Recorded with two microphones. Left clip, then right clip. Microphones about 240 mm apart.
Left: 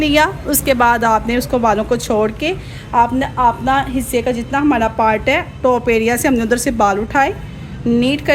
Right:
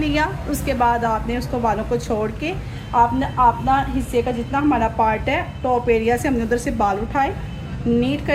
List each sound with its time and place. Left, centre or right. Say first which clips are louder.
0.0 s a woman's voice: left 7 dB; left